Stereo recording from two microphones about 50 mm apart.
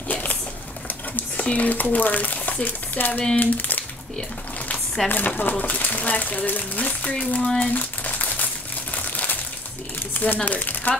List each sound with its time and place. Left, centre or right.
0.1 s a sound: left
1.4 s speech: left
5.1 s speech: left
7.4 s speech: centre
7.7 s crumpling: left
10.2 s speech: left